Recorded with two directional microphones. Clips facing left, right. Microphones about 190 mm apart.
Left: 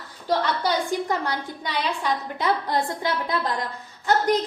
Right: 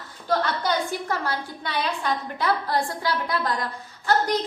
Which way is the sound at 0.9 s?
15° left (ahead or behind).